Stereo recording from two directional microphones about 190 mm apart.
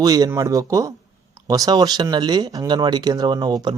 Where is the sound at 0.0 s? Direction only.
20° right (ahead or behind).